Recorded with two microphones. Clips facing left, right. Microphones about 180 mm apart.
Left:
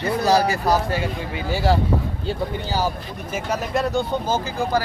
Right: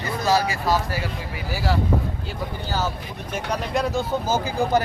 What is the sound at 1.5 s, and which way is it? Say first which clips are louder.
Speech: left 5 dB; 25° left (ahead or behind).